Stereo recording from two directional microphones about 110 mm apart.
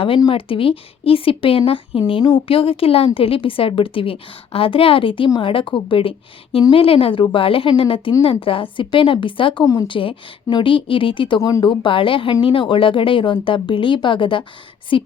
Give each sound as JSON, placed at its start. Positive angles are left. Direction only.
{"t": 0.3, "sound": "a woman's voice", "side_deg": 55}
{"t": 11.3, "sound": "speech", "side_deg": 30}
{"t": 11.6, "sound": "a woman's voice", "side_deg": 50}